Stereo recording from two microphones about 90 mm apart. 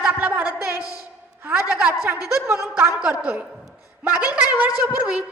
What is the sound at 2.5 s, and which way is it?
A woman's voice, 30° right (ahead or behind).